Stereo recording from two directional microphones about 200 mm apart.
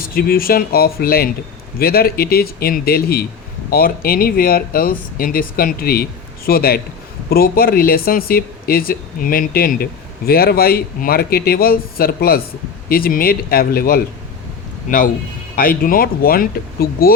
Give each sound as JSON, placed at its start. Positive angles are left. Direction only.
{"t": 0.0, "sound": "speech", "side_deg": 45}